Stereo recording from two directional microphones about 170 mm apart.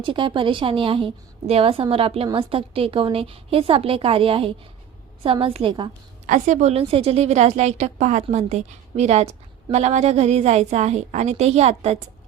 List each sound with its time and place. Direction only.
0.0 s a woman's voice: 30° right (ahead or behind)
6.2 s a woman's voice: 45° right (ahead or behind)